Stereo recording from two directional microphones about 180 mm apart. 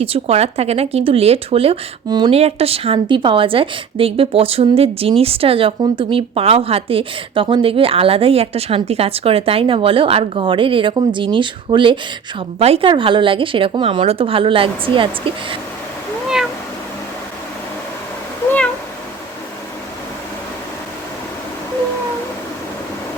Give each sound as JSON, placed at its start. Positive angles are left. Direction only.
{"t": 0.0, "sound": "a woman's voice", "side_deg": -35}